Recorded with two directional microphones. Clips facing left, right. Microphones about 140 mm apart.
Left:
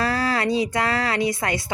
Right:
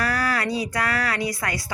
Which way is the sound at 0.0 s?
25° left (ahead or behind).